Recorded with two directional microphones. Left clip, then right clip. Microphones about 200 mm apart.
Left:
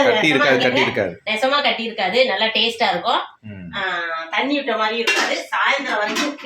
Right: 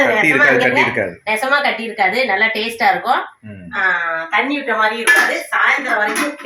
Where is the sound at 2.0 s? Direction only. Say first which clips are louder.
Right 4 dB; 15° left (ahead or behind).